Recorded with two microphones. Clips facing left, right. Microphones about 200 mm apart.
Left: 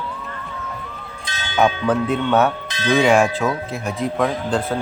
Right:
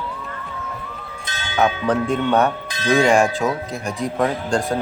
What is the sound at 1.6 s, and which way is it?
Speech, 5° left (ahead or behind).